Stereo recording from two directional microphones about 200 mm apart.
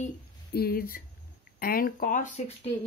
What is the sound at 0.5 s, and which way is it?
Speech, 50° left (ahead or behind).